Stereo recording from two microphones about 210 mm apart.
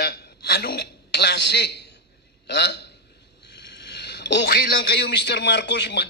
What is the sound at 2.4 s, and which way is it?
A man's voice, 55° left (ahead or behind).